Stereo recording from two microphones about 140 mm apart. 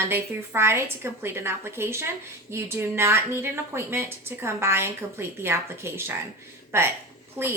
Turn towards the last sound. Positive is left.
turn(degrees=-15)  # may be behind; listen again after turning